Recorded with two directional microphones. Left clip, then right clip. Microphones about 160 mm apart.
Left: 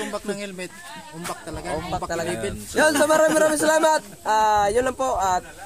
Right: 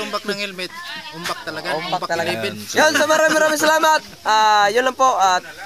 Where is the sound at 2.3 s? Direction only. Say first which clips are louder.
Right 5 dB; 25° right (ahead or behind).